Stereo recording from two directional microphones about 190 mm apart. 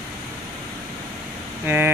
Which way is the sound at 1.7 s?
15° right (ahead or behind).